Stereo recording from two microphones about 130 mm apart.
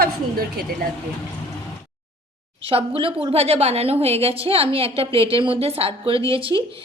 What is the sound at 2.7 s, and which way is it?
A woman's voice, 45° right (ahead or behind).